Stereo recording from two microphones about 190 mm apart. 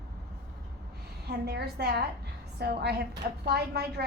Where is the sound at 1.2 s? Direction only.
60° right (ahead or behind).